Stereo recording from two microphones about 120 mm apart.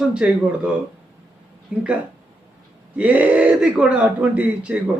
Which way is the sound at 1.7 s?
10° right (ahead or behind).